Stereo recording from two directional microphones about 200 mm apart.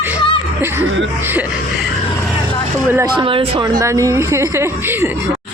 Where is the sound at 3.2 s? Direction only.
25° right (ahead or behind).